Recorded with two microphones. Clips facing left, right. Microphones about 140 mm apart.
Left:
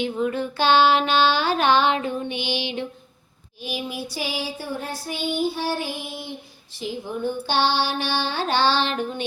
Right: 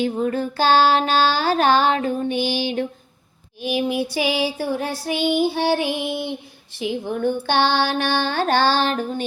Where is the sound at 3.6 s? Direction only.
60° right (ahead or behind).